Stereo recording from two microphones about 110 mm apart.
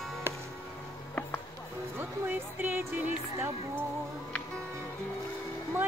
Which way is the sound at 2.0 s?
15° right (ahead or behind).